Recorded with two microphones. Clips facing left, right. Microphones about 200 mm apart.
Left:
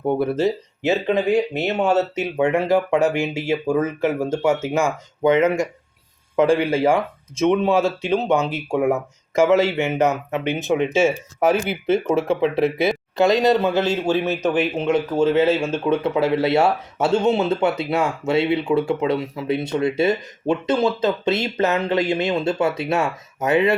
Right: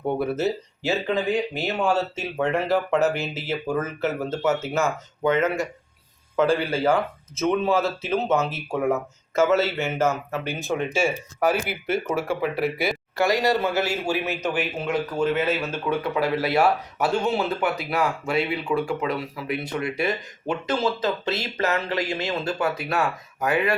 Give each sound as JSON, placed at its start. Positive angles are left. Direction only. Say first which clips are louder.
{"t": 0.3, "sound": "speech", "louder": "left 4 dB", "side_deg": -5}
{"t": 0.8, "sound": "speech", "louder": "left 5 dB", "side_deg": 20}
{"t": 11.3, "sound": "speech", "louder": "left 3 dB", "side_deg": 0}
{"t": 12.4, "sound": "speech", "louder": "left 6 dB", "side_deg": 25}